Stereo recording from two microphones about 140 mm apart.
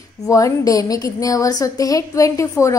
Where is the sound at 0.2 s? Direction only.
25° left (ahead or behind).